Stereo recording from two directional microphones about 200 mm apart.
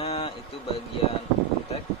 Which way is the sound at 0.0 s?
30° left (ahead or behind).